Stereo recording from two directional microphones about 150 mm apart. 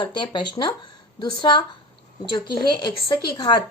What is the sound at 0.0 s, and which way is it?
A woman's voice, 30° left (ahead or behind).